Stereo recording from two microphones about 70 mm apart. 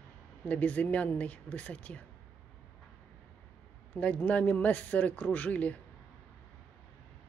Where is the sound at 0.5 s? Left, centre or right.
Left.